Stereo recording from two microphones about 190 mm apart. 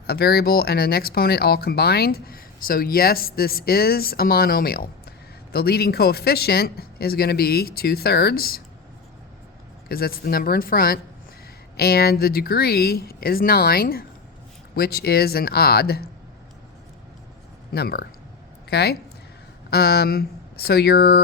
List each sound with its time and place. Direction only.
0.1 s speech: 55° left (ahead or behind)
9.9 s speech: 50° left (ahead or behind)
17.7 s speech: 55° left (ahead or behind)